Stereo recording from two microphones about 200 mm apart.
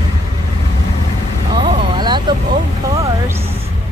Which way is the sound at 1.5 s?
20° right (ahead or behind).